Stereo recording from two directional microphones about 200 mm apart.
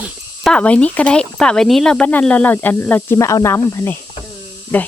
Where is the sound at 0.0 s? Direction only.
5° left (ahead or behind).